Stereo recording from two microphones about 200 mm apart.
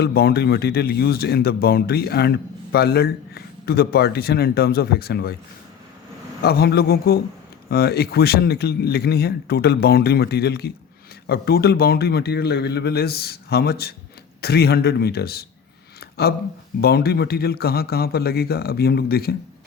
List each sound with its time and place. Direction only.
0.0 s a man's voice: 50° left (ahead or behind)
6.4 s a man's voice: 50° left (ahead or behind)